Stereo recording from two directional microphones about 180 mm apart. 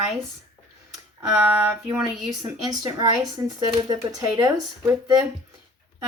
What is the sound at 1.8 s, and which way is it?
Speech, 10° right (ahead or behind).